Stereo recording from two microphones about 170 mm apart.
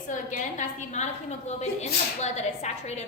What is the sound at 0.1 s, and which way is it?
A woman's voice, 50° left (ahead or behind).